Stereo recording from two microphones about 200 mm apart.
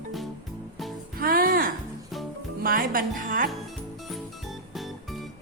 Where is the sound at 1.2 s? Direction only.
45° right (ahead or behind).